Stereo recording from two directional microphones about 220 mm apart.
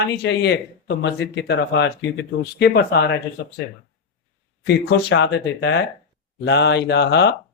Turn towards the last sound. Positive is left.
turn(degrees=50)  # may be behind; listen again after turning